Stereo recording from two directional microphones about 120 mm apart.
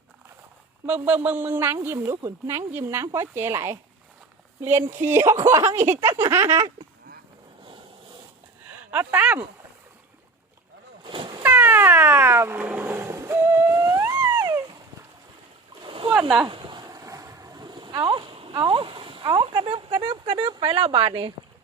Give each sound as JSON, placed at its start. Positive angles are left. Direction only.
{"t": 0.9, "sound": "a woman's voice", "side_deg": -10}
{"t": 8.9, "sound": "a woman's voice", "side_deg": -15}
{"t": 11.0, "sound": "cat", "side_deg": -45}
{"t": 11.4, "sound": "cat", "side_deg": -15}
{"t": 15.8, "sound": "splash", "side_deg": -45}
{"t": 16.5, "sound": "boat", "side_deg": -40}
{"t": 20.4, "sound": "speech", "side_deg": -40}